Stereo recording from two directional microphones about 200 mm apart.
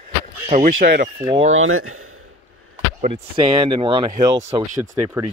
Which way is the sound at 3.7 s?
25° right (ahead or behind).